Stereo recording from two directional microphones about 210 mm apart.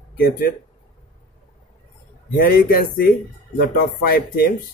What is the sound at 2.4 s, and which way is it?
Speech, 45° left (ahead or behind).